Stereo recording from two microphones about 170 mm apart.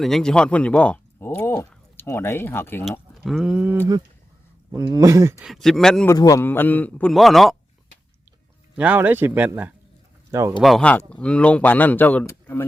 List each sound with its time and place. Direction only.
0.0 s speech: 5° left (ahead or behind)
3.2 s a man's voice: 5° right (ahead or behind)
5.5 s speech: centre (ahead or behind)
6.1 s speech: 20° left (ahead or behind); by 7.5 s centre (ahead or behind)
8.7 s a man's voice: 10° right (ahead or behind)
10.6 s speech: centre (ahead or behind)